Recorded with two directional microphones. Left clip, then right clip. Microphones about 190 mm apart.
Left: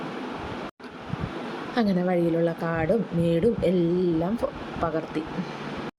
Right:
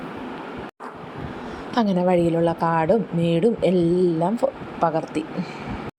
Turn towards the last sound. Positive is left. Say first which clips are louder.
# right 5 dB
turn(degrees=-15)  # may be behind; listen again after turning